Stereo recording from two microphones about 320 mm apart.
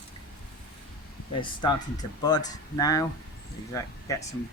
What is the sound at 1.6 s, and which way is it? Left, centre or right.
Speech, centre.